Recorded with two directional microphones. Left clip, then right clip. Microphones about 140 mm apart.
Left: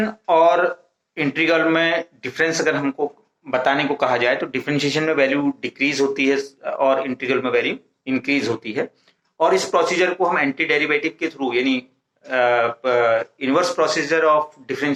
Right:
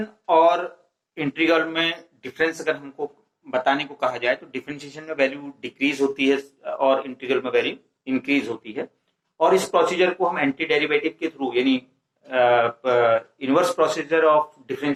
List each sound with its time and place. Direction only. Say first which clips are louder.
0.0 s speech: left 2 dB; 20° left (ahead or behind)